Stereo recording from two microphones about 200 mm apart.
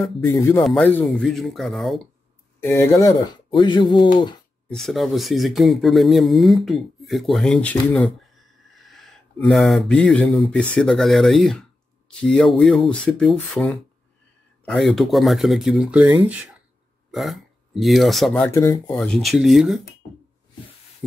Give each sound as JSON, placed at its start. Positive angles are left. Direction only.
{"t": 0.2, "sound": "speech", "side_deg": 10}
{"t": 2.6, "sound": "speech", "side_deg": 15}
{"t": 4.6, "sound": "speech", "side_deg": 0}
{"t": 18.9, "sound": "speech", "side_deg": 0}